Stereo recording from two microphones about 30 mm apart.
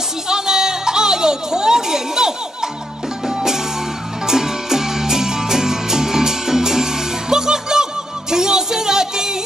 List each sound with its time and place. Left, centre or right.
0.3 s music: right